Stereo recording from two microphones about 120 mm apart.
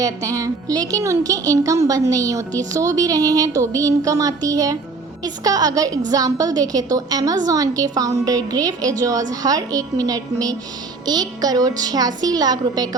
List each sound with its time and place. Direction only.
0.0 s a woman's voice: 30° right (ahead or behind)